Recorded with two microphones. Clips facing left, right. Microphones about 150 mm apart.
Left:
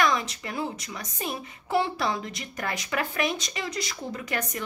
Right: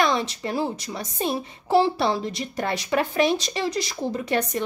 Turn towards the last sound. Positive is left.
turn(degrees=-30)  # may be behind; listen again after turning